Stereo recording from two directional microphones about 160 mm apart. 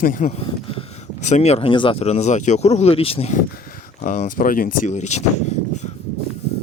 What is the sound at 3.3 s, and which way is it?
Speech, 60° left (ahead or behind).